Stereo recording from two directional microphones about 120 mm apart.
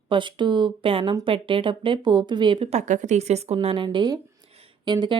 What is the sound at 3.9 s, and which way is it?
Speech, 40° right (ahead or behind).